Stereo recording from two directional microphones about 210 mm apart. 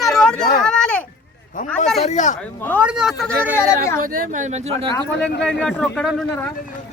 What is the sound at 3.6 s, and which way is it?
Speech, 15° left (ahead or behind).